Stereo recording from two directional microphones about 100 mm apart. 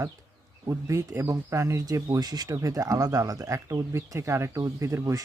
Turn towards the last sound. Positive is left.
turn(degrees=-30)  # may be behind; listen again after turning